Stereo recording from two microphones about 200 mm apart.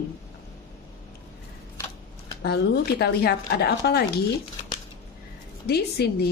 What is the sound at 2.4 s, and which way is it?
Speech, 55° left (ahead or behind).